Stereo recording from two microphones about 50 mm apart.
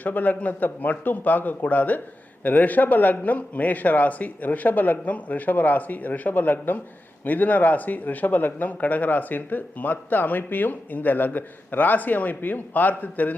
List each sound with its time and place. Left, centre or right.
0.0 s speech: left